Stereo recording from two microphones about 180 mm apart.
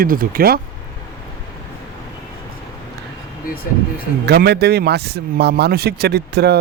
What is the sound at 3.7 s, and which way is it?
Speech, 50° left (ahead or behind).